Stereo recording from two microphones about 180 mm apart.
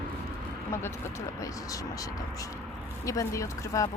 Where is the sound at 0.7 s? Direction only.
15° left (ahead or behind).